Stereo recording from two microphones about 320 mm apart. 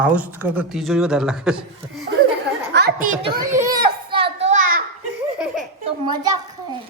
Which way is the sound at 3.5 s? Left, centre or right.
Centre.